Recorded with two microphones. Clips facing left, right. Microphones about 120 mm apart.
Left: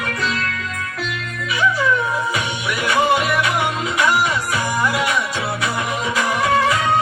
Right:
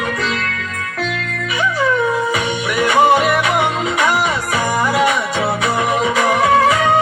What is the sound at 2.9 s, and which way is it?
Music, 50° right (ahead or behind).